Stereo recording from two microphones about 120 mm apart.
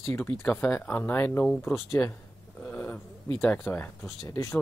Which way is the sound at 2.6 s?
15° left (ahead or behind).